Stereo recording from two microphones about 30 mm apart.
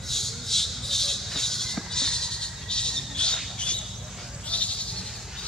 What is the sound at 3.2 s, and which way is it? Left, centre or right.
Squawk, left.